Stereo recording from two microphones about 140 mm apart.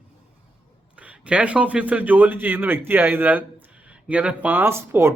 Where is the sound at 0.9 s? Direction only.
10° right (ahead or behind).